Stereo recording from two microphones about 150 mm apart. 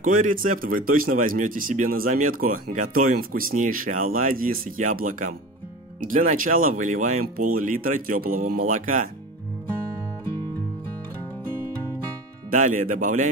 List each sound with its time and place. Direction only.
0.0 s speech: 65° right (ahead or behind)
12.4 s speech: 60° right (ahead or behind)